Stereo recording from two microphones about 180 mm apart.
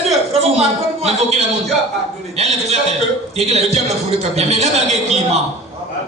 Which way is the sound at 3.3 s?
35° right (ahead or behind).